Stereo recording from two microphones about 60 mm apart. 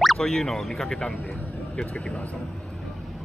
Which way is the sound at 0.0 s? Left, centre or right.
Centre.